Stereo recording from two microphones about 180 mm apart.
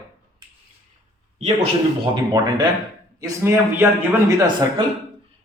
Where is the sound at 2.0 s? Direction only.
25° right (ahead or behind).